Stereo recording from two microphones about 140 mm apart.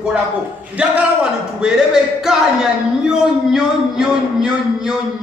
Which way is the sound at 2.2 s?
5° right (ahead or behind).